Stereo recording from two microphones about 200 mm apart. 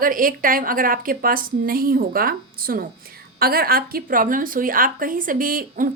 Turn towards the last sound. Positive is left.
turn(degrees=-45)  # may be behind; listen again after turning